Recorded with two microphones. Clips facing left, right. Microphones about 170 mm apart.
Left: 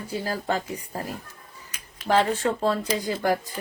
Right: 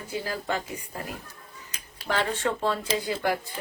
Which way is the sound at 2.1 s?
35° left (ahead or behind).